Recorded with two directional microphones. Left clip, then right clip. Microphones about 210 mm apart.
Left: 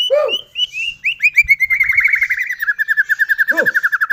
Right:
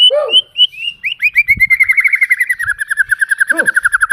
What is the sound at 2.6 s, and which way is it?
Owl, 10° right (ahead or behind).